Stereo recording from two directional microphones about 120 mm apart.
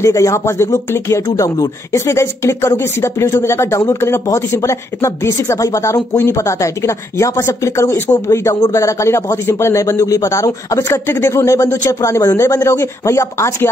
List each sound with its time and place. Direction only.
0.0 s speech: 25° left (ahead or behind)